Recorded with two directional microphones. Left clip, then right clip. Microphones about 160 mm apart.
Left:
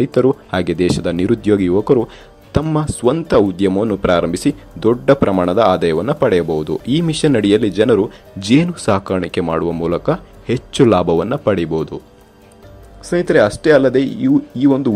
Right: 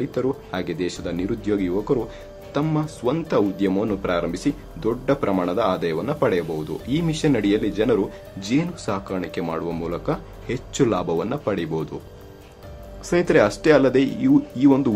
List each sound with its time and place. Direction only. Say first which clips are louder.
0.0 s speech: left 10 dB; 45° left (ahead or behind)
13.0 s speech: left 5 dB; 20° left (ahead or behind)